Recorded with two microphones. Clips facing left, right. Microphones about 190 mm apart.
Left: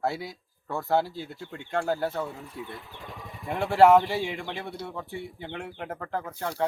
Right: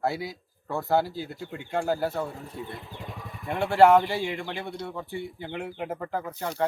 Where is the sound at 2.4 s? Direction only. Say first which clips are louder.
Right 2 dB; 40° right (ahead or behind).